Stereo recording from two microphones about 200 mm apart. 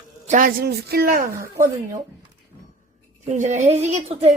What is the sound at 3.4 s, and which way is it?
Speech, 35° right (ahead or behind).